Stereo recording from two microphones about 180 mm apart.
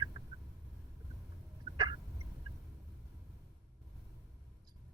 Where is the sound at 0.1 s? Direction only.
20° right (ahead or behind).